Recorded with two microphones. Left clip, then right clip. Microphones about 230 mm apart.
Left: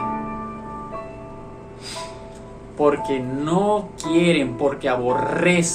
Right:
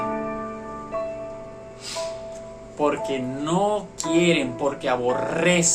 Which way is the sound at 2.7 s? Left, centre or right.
Centre.